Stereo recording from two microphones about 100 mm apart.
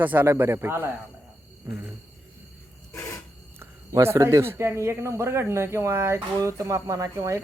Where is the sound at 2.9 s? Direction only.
30° left (ahead or behind).